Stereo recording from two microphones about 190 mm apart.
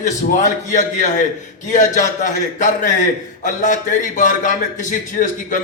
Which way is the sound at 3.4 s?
40° left (ahead or behind).